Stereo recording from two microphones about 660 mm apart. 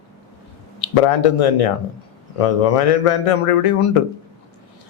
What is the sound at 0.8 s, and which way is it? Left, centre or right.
A man's voice, left.